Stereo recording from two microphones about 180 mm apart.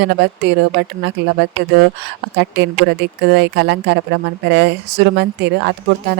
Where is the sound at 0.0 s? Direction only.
75° right (ahead or behind).